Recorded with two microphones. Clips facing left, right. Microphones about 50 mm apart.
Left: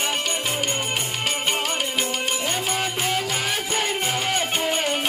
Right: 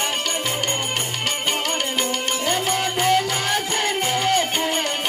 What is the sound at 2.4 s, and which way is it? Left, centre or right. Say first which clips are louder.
Music: right 3 dB; centre.